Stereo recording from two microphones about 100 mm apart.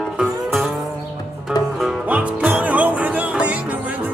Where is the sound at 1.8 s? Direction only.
15° right (ahead or behind).